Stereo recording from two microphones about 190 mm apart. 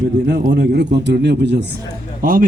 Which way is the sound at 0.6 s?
60° right (ahead or behind).